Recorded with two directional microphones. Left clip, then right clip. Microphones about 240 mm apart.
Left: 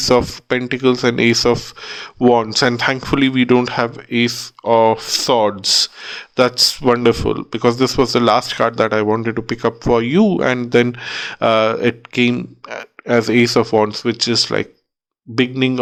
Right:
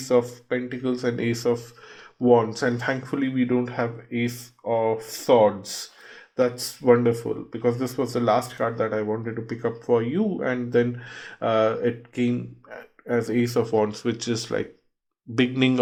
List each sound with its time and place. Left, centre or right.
0.1 s speech: left
6.3 s speech: left
8.5 s speech: left
15.4 s speech: centre